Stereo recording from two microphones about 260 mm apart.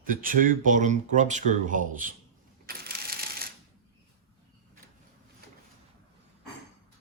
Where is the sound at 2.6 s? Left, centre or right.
Right.